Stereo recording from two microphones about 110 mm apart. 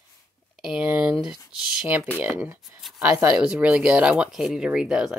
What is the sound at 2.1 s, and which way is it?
Speech, 20° right (ahead or behind).